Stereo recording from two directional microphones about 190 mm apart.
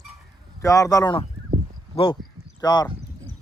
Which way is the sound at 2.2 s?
Centre (ahead or behind).